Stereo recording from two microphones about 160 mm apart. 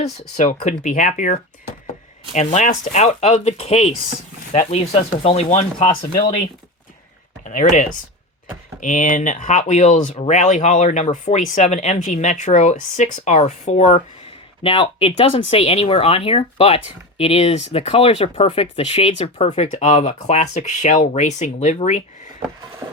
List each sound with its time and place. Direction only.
0.0 s speech: 45° left (ahead or behind)
7.4 s speech: 50° left (ahead or behind)
14.6 s speech: 35° left (ahead or behind)